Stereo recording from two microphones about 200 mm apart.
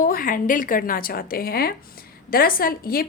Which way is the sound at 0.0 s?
45° left (ahead or behind).